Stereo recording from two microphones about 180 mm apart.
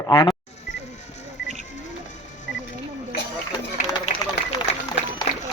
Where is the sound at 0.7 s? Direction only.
40° left (ahead or behind).